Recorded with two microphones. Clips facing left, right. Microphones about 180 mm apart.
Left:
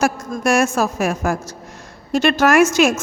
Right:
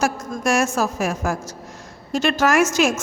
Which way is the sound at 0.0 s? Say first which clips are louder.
Left 3 dB; 60° left (ahead or behind).